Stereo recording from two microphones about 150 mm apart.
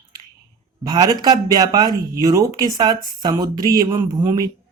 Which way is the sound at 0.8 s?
25° right (ahead or behind).